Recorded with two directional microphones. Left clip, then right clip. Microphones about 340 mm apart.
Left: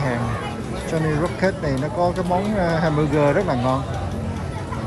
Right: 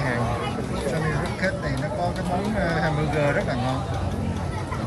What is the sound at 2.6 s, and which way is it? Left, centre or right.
Speech, centre.